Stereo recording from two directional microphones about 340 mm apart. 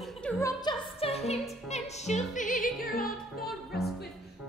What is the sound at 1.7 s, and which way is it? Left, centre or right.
Music, centre.